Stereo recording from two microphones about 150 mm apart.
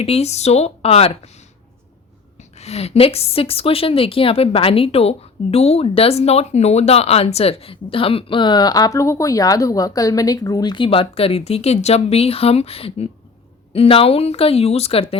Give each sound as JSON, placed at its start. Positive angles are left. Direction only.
{"t": 0.0, "sound": "speech", "side_deg": 45}
{"t": 2.4, "sound": "a woman's voice", "side_deg": 45}